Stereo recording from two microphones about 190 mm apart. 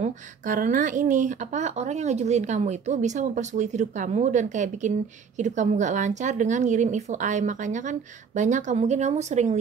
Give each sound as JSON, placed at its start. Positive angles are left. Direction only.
{"t": 0.0, "sound": "a woman's voice", "side_deg": -45}